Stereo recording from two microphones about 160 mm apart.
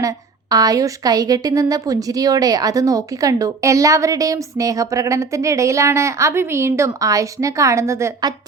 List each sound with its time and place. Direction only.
0.5 s a woman's voice: 25° right (ahead or behind)